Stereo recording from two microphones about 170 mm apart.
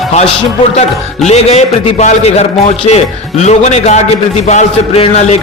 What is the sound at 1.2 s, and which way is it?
Speech, 40° left (ahead or behind).